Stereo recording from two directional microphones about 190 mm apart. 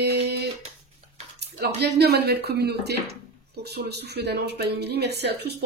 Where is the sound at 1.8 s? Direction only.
60° right (ahead or behind).